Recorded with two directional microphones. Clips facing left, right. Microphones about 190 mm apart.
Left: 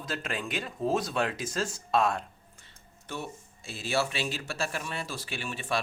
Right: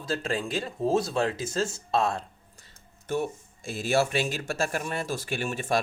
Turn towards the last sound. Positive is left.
turn(degrees=-45)  # may be behind; listen again after turning